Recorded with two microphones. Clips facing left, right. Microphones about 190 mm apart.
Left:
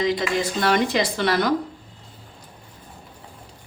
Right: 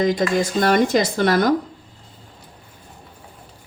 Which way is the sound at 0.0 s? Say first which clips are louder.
Right 4 dB; 45° right (ahead or behind).